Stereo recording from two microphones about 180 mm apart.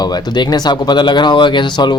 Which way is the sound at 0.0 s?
20° left (ahead or behind).